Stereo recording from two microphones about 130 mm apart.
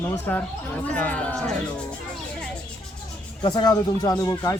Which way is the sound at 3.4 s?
30° left (ahead or behind).